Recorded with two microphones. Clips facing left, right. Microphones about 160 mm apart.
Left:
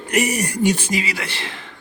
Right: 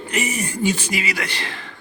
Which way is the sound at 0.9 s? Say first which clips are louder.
Left 1 dB; 35° left (ahead or behind).